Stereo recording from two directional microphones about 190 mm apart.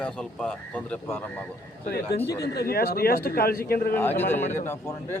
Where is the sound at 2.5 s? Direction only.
55° left (ahead or behind).